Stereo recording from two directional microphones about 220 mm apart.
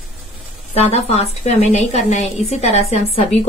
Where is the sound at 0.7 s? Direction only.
25° left (ahead or behind).